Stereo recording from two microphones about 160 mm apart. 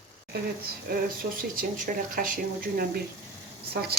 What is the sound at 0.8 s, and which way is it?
Speech, 65° right (ahead or behind).